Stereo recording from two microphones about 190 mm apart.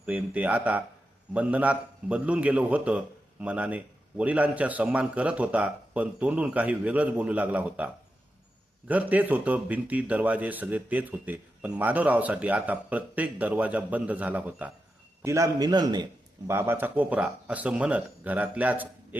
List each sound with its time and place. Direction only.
0.0 s speech: 5° right (ahead or behind)
8.9 s a man's voice: 10° right (ahead or behind)